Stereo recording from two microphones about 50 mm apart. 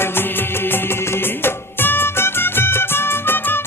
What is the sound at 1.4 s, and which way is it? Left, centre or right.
Music, left.